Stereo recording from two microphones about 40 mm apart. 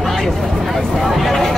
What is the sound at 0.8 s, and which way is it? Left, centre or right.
Speech, centre.